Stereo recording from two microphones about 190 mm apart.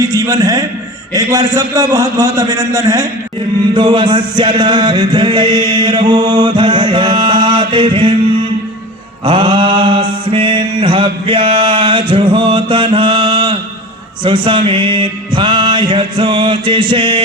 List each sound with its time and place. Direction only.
0.0 s a man's voice: 15° right (ahead or behind)
3.8 s music: 25° right (ahead or behind)
9.2 s mantra: 25° right (ahead or behind)
14.3 s music: 25° right (ahead or behind)